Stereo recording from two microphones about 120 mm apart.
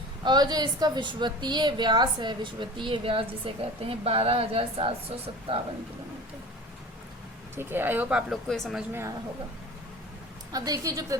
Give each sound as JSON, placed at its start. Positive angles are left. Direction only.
{"t": 0.3, "sound": "a woman's voice", "side_deg": -35}
{"t": 7.5, "sound": "speech", "side_deg": -20}
{"t": 8.3, "sound": "speech", "side_deg": 0}
{"t": 8.9, "sound": "a woman's voice", "side_deg": -20}
{"t": 10.5, "sound": "a woman's voice", "side_deg": -30}